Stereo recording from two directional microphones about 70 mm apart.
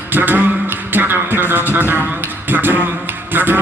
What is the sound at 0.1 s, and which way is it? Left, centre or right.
Speech, right.